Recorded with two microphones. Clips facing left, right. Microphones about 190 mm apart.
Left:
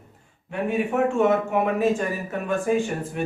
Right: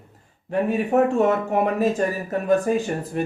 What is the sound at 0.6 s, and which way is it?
Speech, 40° right (ahead or behind).